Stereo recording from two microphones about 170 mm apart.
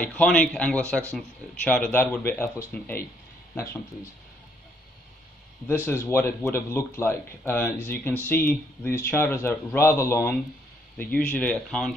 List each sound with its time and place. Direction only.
0.0 s speech: 5° left (ahead or behind)
5.7 s speech: 15° left (ahead or behind)